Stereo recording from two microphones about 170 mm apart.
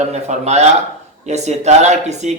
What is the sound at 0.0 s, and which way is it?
A man's voice, 40° right (ahead or behind).